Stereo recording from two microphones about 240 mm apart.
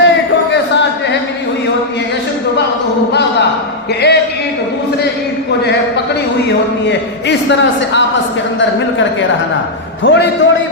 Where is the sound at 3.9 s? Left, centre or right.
Left.